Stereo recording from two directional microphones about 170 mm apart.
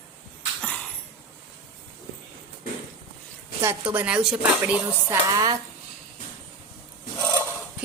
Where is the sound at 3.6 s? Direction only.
15° right (ahead or behind).